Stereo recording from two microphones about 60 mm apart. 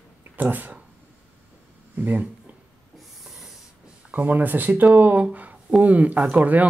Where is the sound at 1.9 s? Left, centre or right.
Right.